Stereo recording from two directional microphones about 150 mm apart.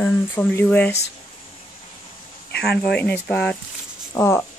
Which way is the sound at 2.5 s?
90° left.